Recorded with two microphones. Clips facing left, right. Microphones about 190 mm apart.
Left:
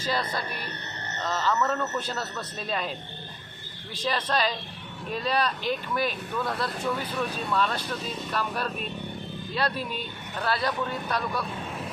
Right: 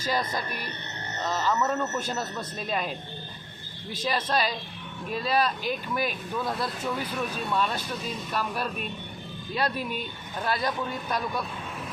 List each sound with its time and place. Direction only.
0.0 s a man's voice: 10° right (ahead or behind)
3.9 s a man's voice: 10° right (ahead or behind)